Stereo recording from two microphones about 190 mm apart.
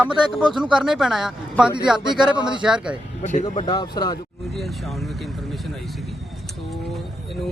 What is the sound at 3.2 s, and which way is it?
Speech, 40° left (ahead or behind).